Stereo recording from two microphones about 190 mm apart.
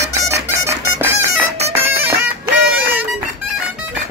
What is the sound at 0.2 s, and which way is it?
Music, 15° right (ahead or behind).